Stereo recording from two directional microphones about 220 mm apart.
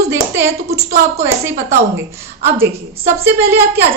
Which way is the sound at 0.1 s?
10° right (ahead or behind).